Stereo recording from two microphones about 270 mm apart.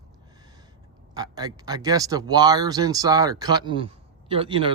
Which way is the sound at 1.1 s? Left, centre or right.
Centre.